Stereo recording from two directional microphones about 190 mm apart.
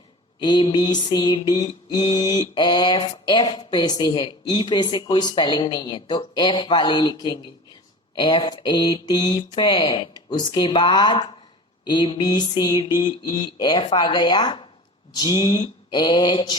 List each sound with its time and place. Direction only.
0.3 s mantra: 20° left (ahead or behind)